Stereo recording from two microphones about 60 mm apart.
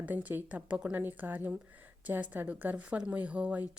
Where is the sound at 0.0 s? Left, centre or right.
Right.